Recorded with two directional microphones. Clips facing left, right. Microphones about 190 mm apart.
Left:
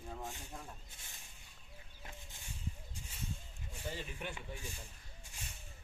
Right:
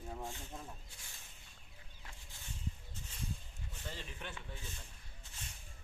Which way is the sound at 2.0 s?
20° left (ahead or behind).